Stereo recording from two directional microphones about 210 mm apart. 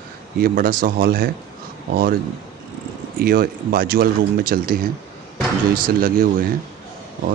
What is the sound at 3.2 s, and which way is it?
Speech, 45° right (ahead or behind).